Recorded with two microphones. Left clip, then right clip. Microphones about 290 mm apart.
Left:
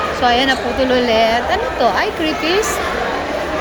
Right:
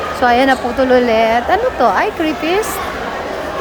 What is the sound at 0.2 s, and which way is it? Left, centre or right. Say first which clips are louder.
A woman's voice: right 4 dB; centre.